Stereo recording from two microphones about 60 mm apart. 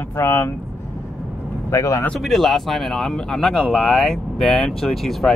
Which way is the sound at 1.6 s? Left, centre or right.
Left.